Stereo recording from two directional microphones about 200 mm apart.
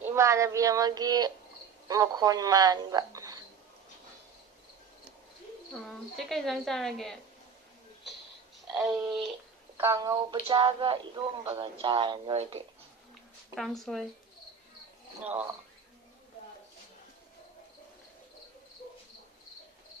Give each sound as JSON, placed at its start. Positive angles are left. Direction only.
{"t": 0.0, "sound": "speech", "side_deg": -15}
{"t": 5.9, "sound": "a woman's voice", "side_deg": 0}
{"t": 8.6, "sound": "a sound", "side_deg": 0}
{"t": 9.8, "sound": "speech", "side_deg": -15}
{"t": 10.4, "sound": "speech", "side_deg": -25}
{"t": 13.6, "sound": "a woman's voice", "side_deg": 0}